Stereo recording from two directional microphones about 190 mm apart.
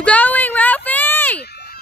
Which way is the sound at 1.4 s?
60° left (ahead or behind).